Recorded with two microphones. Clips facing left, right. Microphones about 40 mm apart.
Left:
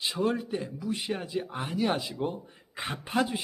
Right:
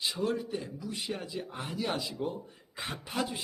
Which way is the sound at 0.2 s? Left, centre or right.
Left.